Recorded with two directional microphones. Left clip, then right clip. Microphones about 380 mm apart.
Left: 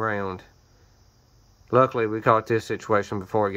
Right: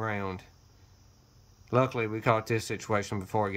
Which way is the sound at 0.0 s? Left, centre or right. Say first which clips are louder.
Left 7 dB; centre.